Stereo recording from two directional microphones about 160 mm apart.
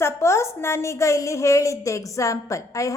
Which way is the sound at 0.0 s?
15° left (ahead or behind).